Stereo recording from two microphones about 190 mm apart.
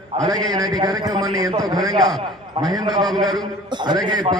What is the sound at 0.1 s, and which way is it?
Speech, 30° right (ahead or behind).